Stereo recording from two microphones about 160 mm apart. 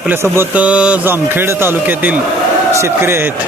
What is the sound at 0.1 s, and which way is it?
A man's voice, 15° right (ahead or behind).